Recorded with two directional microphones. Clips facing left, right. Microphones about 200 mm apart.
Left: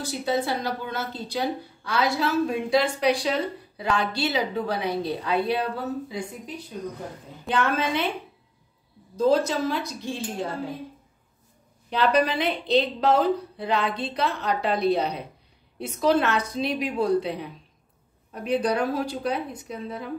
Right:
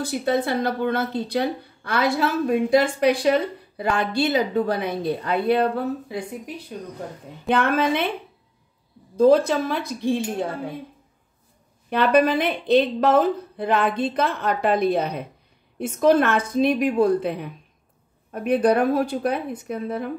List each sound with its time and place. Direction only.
0.0 s a woman's voice: 55° right (ahead or behind)
9.1 s a woman's voice: 55° right (ahead or behind)
11.9 s a woman's voice: 50° right (ahead or behind)